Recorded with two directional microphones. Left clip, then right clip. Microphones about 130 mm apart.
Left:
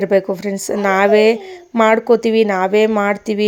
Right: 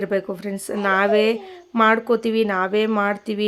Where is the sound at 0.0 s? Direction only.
35° left (ahead or behind).